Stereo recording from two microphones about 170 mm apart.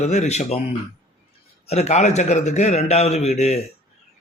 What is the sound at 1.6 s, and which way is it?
Speech, 40° left (ahead or behind).